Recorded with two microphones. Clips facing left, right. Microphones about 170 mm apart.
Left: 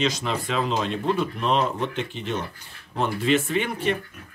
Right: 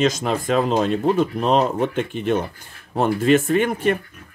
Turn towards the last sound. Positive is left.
turn(degrees=-50)  # may be behind; listen again after turning